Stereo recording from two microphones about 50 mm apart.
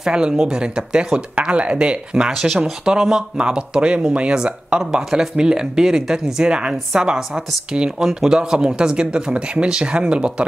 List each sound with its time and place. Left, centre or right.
0.0 s speech: centre
2.3 s speech: centre
2.8 s speech: centre